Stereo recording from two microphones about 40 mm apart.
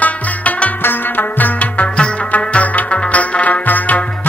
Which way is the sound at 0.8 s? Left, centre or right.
Left.